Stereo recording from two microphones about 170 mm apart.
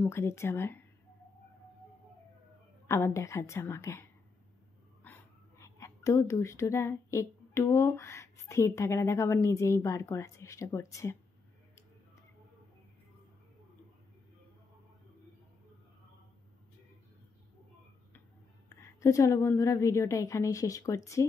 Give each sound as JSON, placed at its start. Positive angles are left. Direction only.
{"t": 0.0, "sound": "a woman's voice", "side_deg": 15}
{"t": 2.9, "sound": "a woman's voice", "side_deg": 15}
{"t": 5.0, "sound": "speech", "side_deg": 15}
{"t": 18.8, "sound": "a woman's voice", "side_deg": 20}